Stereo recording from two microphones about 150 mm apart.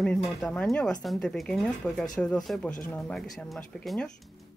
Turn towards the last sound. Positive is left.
turn(degrees=5)  # may be behind; listen again after turning